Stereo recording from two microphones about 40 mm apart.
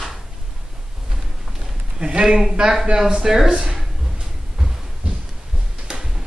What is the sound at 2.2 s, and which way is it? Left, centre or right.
Speech, centre.